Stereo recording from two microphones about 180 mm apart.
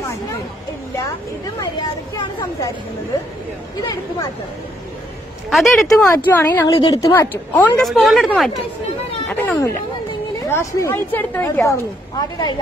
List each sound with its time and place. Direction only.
1.6 s speech: 20° left (ahead or behind)
5.5 s a woman's voice: centre (ahead or behind)
5.9 s a woman's voice: 10° left (ahead or behind)